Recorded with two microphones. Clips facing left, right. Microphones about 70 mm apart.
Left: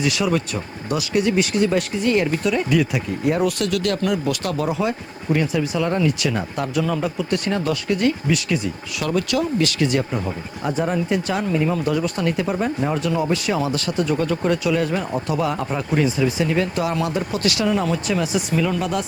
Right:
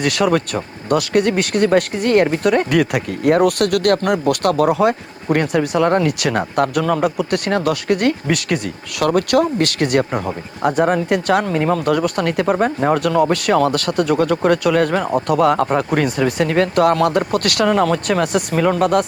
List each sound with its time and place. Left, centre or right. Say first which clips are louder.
0.0 s speech: right 4 dB; right